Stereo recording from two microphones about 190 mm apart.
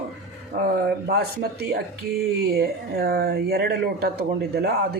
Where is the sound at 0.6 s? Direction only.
55° right (ahead or behind).